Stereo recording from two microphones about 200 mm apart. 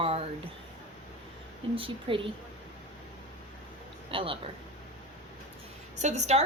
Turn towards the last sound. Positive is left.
turn(degrees=-35)  # may be behind; listen again after turning